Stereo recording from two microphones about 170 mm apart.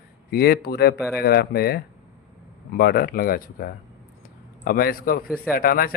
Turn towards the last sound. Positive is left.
turn(degrees=60)  # may be behind; listen again after turning